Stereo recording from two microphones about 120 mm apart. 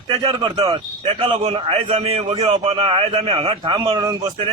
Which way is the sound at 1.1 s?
50° right (ahead or behind).